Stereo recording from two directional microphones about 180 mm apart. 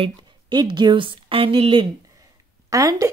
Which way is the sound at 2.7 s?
20° right (ahead or behind).